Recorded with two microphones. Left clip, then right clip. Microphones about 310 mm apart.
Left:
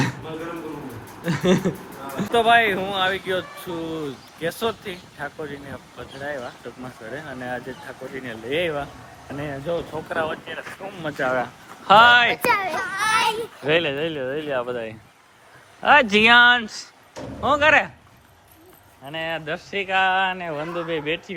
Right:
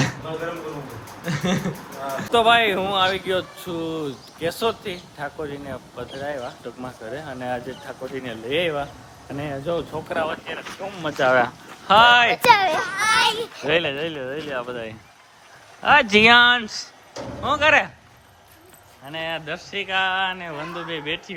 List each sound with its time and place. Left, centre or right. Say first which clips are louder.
1.2 s speech: left 4 dB; centre
2.3 s speech: even; centre
11.2 s speech: right 6 dB; right
11.9 s speech: left 1 dB; centre
12.7 s speech: right 2 dB; centre
19.0 s speech: left 1 dB; centre